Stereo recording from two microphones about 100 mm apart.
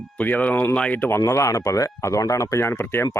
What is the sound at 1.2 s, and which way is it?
Speech, 30° left (ahead or behind).